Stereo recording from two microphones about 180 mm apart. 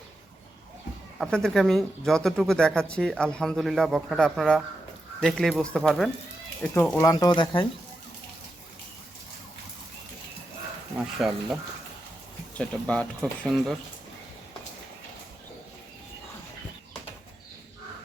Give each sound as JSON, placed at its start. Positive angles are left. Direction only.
{"t": 1.2, "sound": "speech", "side_deg": 0}
{"t": 11.2, "sound": "speech", "side_deg": 0}
{"t": 12.5, "sound": "speech", "side_deg": 5}